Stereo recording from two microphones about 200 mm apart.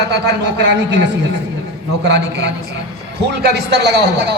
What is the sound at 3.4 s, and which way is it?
Speech, 55° right (ahead or behind).